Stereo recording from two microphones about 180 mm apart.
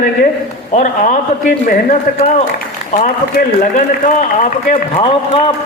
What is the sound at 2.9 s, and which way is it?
A man's voice, 45° left (ahead or behind).